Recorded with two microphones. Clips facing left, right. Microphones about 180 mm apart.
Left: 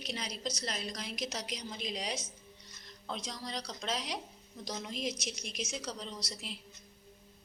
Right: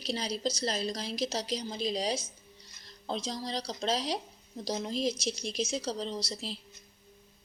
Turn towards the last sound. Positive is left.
turn(degrees=-30)  # may be behind; listen again after turning